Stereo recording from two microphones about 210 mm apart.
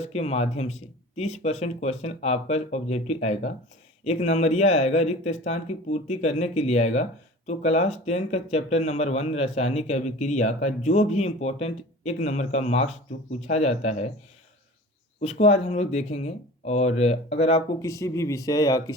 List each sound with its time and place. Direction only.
0.0 s speech: 30° left (ahead or behind)
15.2 s speech: 30° left (ahead or behind)
17.8 s speech: 15° left (ahead or behind)